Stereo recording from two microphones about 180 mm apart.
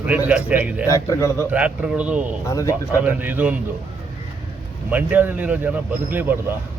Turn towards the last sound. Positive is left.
turn(degrees=-10)  # may be behind; listen again after turning